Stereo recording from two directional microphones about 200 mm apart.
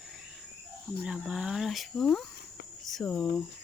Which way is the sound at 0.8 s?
5° right (ahead or behind).